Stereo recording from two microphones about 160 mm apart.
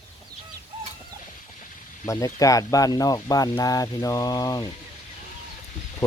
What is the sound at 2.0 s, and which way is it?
Speech, 20° left (ahead or behind).